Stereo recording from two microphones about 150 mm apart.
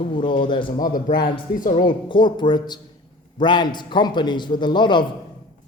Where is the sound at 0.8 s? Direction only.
65° left (ahead or behind).